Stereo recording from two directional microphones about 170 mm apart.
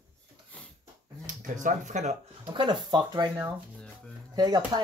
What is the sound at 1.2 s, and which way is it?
Speech, 50° right (ahead or behind).